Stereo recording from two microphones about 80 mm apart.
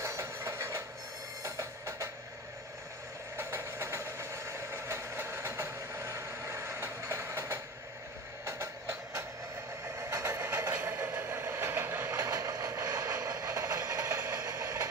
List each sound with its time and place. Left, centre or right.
0.0 s train: right
1.4 s music: right
3.3 s train: right
9.9 s train: right
10.7 s vehicle: right